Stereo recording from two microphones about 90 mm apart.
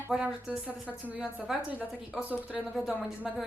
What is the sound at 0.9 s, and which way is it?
Speech, 15° left (ahead or behind).